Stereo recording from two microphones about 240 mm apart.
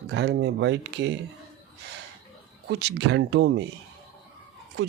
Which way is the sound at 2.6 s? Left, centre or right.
Right.